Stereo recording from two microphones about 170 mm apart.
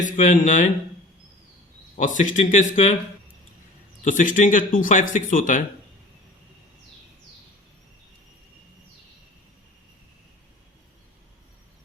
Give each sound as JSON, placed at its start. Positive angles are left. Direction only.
{"t": 0.0, "sound": "speech", "side_deg": 45}
{"t": 2.0, "sound": "speech", "side_deg": 50}
{"t": 4.0, "sound": "speech", "side_deg": 50}